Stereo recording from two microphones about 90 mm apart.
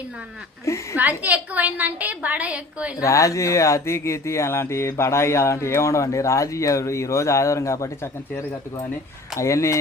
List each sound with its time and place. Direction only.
0.7 s speech: 35° left (ahead or behind)
1.2 s a woman's voice: 15° right (ahead or behind)
3.0 s speech: 35° left (ahead or behind)